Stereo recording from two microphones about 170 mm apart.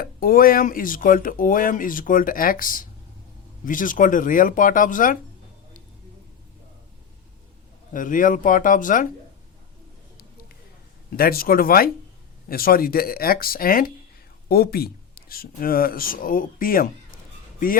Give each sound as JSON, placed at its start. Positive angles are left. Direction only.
{"t": 0.0, "sound": "speech", "side_deg": 60}
{"t": 7.9, "sound": "speech", "side_deg": 50}
{"t": 11.2, "sound": "speech", "side_deg": 60}